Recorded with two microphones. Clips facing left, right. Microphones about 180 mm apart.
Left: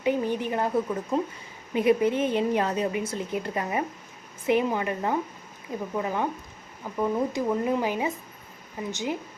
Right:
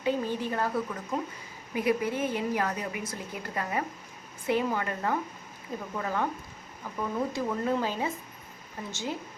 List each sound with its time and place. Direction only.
0.0 s a woman's voice: 15° left (ahead or behind)